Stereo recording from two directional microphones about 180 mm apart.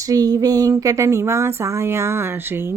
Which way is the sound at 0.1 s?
20° right (ahead or behind).